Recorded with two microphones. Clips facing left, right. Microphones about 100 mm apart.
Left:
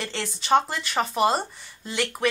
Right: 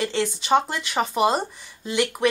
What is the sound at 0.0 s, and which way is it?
Speech, 5° right (ahead or behind).